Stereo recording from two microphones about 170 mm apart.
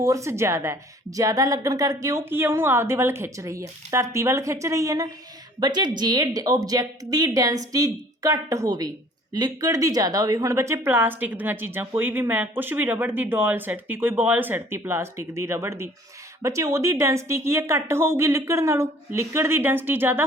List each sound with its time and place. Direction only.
0.0 s a woman's voice: 20° right (ahead or behind)